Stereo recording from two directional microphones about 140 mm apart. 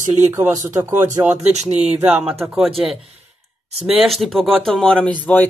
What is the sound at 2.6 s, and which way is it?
Speech, centre (ahead or behind).